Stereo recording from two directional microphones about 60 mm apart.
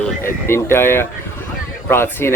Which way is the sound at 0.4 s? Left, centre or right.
Left.